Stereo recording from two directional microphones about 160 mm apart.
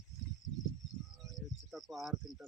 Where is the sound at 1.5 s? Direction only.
Centre (ahead or behind).